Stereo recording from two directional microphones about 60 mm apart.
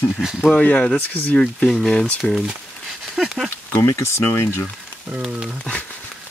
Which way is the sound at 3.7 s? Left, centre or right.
Left.